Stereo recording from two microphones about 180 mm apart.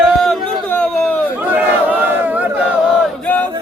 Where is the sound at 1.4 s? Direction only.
10° right (ahead or behind).